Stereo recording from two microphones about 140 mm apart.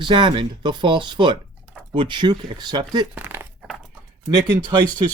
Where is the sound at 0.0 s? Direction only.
35° right (ahead or behind).